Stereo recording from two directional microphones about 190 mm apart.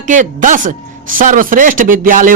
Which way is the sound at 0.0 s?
40° right (ahead or behind).